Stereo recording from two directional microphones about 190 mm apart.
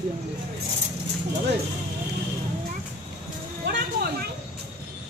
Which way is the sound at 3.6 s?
65° right (ahead or behind).